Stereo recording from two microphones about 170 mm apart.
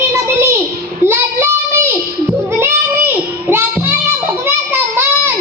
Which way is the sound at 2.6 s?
15° right (ahead or behind).